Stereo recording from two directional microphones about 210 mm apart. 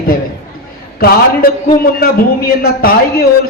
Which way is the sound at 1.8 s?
45° left (ahead or behind).